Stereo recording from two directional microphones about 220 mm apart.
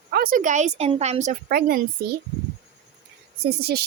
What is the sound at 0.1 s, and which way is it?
Speech, 40° right (ahead or behind).